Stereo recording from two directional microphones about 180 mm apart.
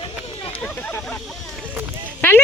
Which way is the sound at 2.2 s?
10° left (ahead or behind).